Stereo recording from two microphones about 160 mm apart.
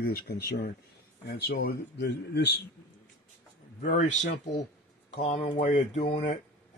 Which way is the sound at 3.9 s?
45° left (ahead or behind).